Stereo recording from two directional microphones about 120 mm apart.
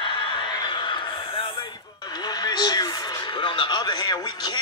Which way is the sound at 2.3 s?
35° left (ahead or behind).